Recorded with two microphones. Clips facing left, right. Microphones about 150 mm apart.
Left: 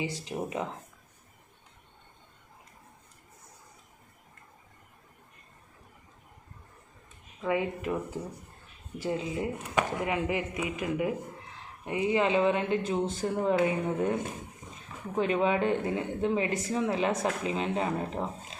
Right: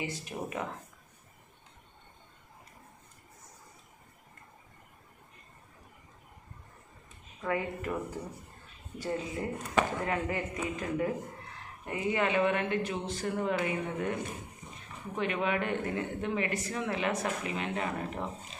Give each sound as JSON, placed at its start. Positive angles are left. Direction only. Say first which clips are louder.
{"t": 0.3, "sound": "speech", "louder": "left 5 dB", "side_deg": 20}
{"t": 7.4, "sound": "speech", "louder": "left 3 dB", "side_deg": 20}